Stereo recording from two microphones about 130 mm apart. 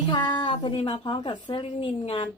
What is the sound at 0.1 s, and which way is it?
A woman's voice, 35° left (ahead or behind).